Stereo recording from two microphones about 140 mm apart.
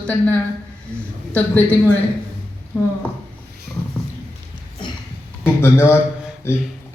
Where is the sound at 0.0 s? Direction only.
10° left (ahead or behind).